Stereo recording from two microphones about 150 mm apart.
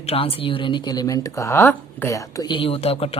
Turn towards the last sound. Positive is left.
turn(degrees=40)  # may be behind; listen again after turning